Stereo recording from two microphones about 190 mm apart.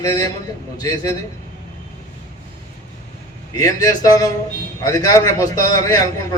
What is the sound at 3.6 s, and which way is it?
A man's voice, 20° left (ahead or behind).